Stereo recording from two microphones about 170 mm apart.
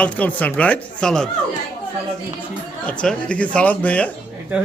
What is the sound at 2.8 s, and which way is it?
Speech, 5° left (ahead or behind).